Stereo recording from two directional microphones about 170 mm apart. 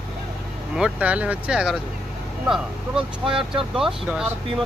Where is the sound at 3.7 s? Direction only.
5° right (ahead or behind).